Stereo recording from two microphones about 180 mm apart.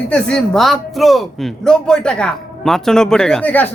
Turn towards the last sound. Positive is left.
turn(degrees=10)  # may be behind; listen again after turning